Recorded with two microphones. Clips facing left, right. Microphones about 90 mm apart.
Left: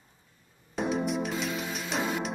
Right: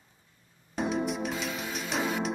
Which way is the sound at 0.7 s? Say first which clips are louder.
Left 1 dB; centre (ahead or behind).